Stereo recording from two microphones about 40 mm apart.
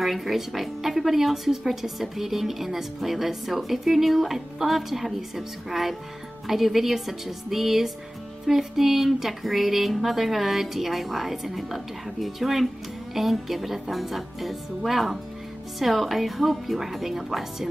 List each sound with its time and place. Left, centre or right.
0.0 s speech: centre